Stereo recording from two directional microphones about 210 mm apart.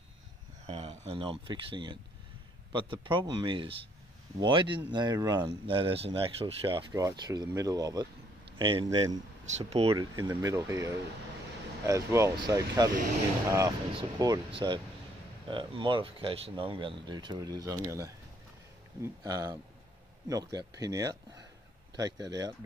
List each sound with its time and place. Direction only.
0.7 s speech: 30° right (ahead or behind)
9.5 s speech: 30° right (ahead or behind)
10.1 s speech: 15° right (ahead or behind)
13.9 s speech: 15° right (ahead or behind)
19.2 s speech: 15° right (ahead or behind)